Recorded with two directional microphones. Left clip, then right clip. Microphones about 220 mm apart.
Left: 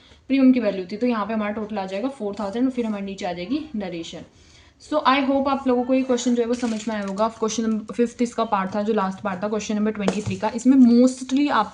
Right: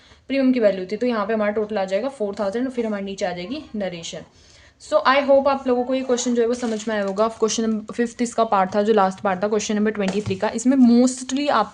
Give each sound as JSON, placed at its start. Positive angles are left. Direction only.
{"t": 0.3, "sound": "a woman's voice", "side_deg": -40}